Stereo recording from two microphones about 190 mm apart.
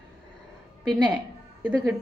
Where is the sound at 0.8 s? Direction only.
20° right (ahead or behind).